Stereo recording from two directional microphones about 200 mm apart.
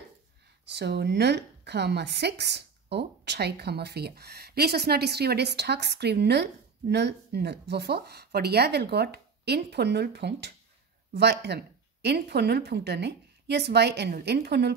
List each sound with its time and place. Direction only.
0.7 s a woman's voice: 55° right (ahead or behind)